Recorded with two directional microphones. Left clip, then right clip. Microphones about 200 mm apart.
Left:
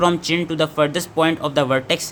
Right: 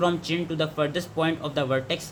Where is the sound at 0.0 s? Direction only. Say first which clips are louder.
Left 7 dB; 30° left (ahead or behind).